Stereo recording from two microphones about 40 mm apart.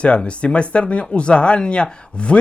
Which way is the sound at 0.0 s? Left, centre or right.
Left.